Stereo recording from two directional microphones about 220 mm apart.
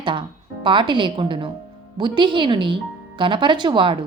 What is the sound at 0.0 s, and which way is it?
A woman's voice, 20° right (ahead or behind).